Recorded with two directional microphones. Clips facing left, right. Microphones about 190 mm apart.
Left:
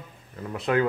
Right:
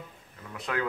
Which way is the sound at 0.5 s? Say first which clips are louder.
Left 9 dB; 30° left (ahead or behind).